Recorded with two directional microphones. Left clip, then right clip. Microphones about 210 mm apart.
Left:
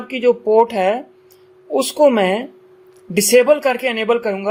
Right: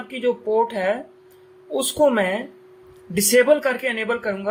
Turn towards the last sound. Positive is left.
turn(degrees=30)  # may be behind; listen again after turning